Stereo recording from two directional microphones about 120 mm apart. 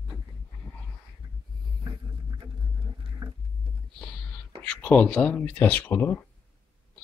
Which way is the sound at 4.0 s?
5° left (ahead or behind).